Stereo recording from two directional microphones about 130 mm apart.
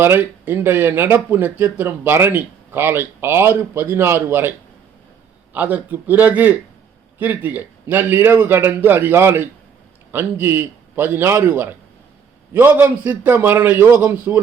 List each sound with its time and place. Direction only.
0.0 s speech: 15° right (ahead or behind)
5.5 s speech: 15° right (ahead or behind)